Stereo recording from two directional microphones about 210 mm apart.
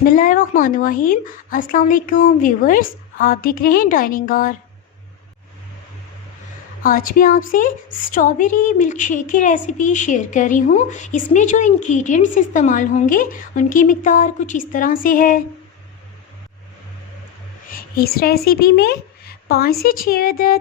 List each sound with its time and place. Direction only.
0.0 s a woman's voice: 40° left (ahead or behind)
6.8 s a woman's voice: 40° left (ahead or behind)
17.7 s speech: 45° left (ahead or behind)